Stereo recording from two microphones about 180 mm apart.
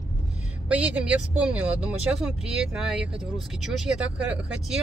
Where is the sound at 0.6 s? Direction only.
5° right (ahead or behind).